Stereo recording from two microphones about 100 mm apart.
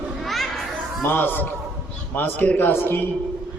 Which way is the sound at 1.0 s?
20° left (ahead or behind).